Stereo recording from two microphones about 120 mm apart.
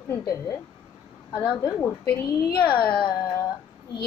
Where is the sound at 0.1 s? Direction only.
30° left (ahead or behind).